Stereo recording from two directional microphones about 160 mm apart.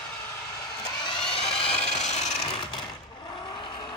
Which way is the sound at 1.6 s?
45° left (ahead or behind).